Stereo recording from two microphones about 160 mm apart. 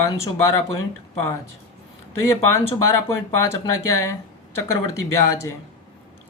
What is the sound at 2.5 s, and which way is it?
Speech, 15° left (ahead or behind).